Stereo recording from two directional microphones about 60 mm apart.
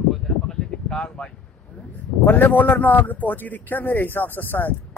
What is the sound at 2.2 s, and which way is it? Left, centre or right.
A man's voice, left.